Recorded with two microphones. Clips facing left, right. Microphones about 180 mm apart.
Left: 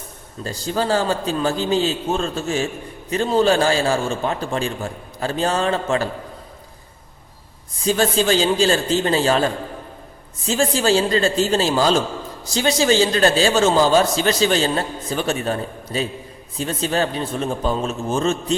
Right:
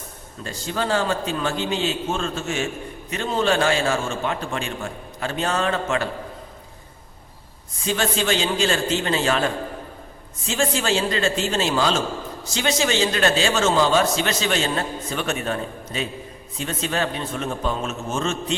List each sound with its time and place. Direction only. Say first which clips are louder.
0.4 s a man's voice: left 4 dB; 35° left (ahead or behind)
7.9 s a man's voice: left 5 dB; 35° left (ahead or behind)